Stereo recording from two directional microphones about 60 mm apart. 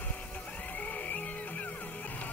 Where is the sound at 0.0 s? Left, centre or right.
Left.